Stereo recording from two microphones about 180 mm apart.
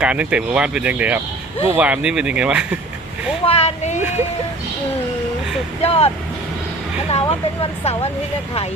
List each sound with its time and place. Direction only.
0.0 s speech: 5° right (ahead or behind)
3.4 s speech: 35° left (ahead or behind)
5.8 s speech: 35° left (ahead or behind)
7.1 s speech: 30° left (ahead or behind)